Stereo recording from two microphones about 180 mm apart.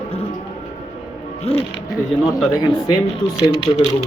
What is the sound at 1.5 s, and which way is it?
Speech, 35° left (ahead or behind).